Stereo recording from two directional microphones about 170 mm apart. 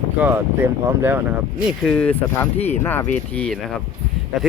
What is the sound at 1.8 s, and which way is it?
Speech, 5° left (ahead or behind).